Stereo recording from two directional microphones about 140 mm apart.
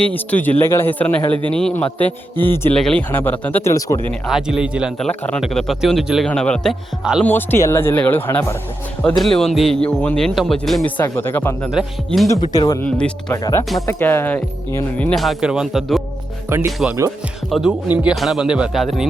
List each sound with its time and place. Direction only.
0.0 s a man's voice: 10° left (ahead or behind)
4.3 s speech: 5° right (ahead or behind)
5.0 s speech: 5° left (ahead or behind)
7.0 s speech: 5° right (ahead or behind)
7.3 s a man's voice: 15° left (ahead or behind)
9.0 s speech: 5° left (ahead or behind)
10.8 s a man's voice: 10° left (ahead or behind)
11.7 s speech: centre (ahead or behind)
12.5 s speech: 20° left (ahead or behind)
12.8 s a man's voice: 10° left (ahead or behind)
13.3 s a man's voice: 20° left (ahead or behind)
15.1 s speech: centre (ahead or behind)